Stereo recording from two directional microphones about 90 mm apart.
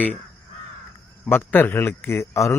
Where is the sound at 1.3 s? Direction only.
20° left (ahead or behind).